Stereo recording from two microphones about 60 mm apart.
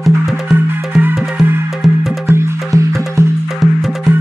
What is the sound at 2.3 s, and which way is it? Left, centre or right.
Music, right.